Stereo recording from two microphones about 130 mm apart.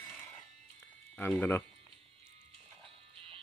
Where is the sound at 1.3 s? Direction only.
15° left (ahead or behind).